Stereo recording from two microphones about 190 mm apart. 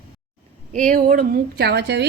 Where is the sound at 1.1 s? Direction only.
55° right (ahead or behind).